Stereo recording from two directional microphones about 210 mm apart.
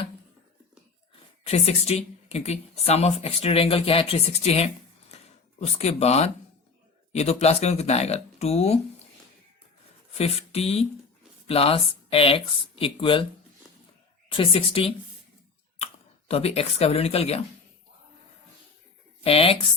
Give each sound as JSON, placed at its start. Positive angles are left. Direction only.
{"t": 1.5, "sound": "speech", "side_deg": 30}
{"t": 10.2, "sound": "speech", "side_deg": 30}
{"t": 14.3, "sound": "speech", "side_deg": 25}
{"t": 16.3, "sound": "speech", "side_deg": 30}
{"t": 19.2, "sound": "speech", "side_deg": 25}